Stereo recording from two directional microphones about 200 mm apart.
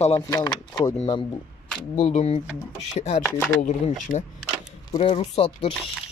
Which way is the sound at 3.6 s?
35° left (ahead or behind).